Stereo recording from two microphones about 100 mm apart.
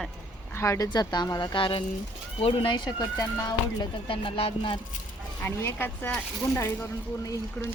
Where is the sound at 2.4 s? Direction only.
70° left (ahead or behind).